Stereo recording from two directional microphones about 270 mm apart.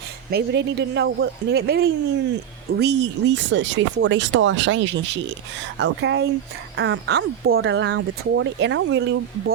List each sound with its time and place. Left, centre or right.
0.3 s speech: right